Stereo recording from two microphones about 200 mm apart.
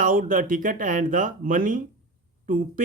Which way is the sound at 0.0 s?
40° right (ahead or behind).